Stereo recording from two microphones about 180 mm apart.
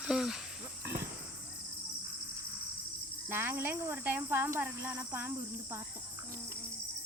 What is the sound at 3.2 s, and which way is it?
Speech, 10° right (ahead or behind).